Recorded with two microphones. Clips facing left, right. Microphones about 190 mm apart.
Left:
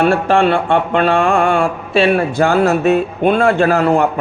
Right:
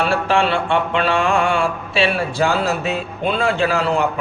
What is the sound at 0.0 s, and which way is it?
Speech, 50° left (ahead or behind).